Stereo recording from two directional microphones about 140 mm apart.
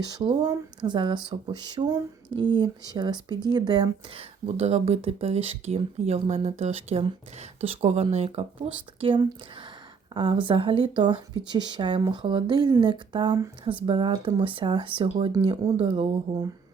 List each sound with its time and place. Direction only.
0.0 s speech: 30° right (ahead or behind)